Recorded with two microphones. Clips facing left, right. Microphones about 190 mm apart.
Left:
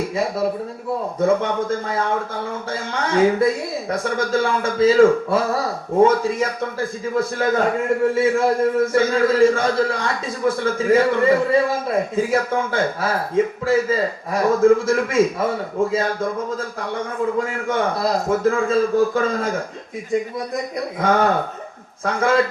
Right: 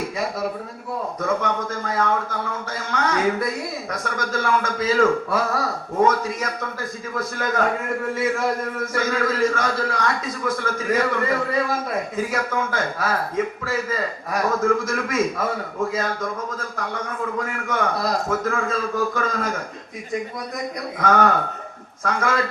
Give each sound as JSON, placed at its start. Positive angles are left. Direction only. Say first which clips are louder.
{"t": 1.2, "sound": "a man's voice", "louder": "left 6 dB", "side_deg": 30}
{"t": 16.6, "sound": "a man's voice", "louder": "left 3 dB", "side_deg": 30}
{"t": 21.0, "sound": "a man's voice", "louder": "left 1 dB", "side_deg": 30}